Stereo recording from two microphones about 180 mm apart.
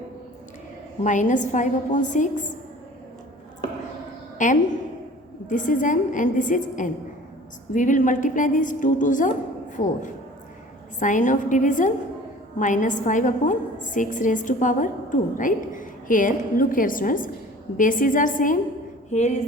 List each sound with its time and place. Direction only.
1.0 s a woman's voice: 45° left (ahead or behind)
4.4 s a woman's voice: 45° left (ahead or behind)
19.1 s a sound: 40° left (ahead or behind)